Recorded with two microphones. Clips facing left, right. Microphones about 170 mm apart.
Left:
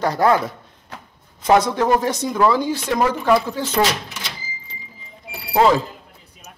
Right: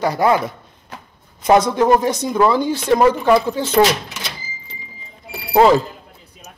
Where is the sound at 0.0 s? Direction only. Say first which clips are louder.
Right 1 dB; 10° right (ahead or behind).